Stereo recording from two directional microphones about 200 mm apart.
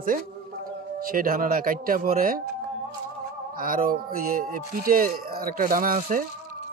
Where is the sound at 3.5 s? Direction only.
45° right (ahead or behind).